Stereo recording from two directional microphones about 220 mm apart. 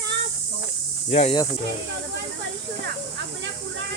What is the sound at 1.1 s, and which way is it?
Speech, 25° left (ahead or behind).